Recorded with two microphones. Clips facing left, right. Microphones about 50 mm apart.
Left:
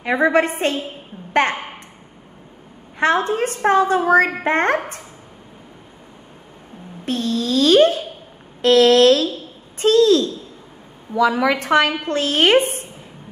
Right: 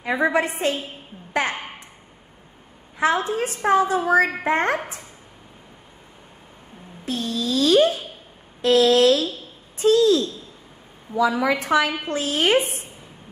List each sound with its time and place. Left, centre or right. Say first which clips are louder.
0.0 s a woman's voice: left 4 dB; left
3.0 s a child's voice: left 3 dB; left
7.1 s a sound: left 4 dB; left
8.6 s a woman's voice: left 4 dB; left
12.5 s a child's voice: left 5 dB; left